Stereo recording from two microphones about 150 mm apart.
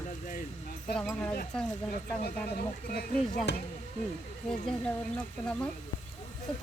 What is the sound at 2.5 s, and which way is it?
Speech, 90° left.